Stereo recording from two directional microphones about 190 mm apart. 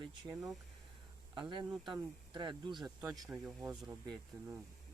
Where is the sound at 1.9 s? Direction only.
25° right (ahead or behind).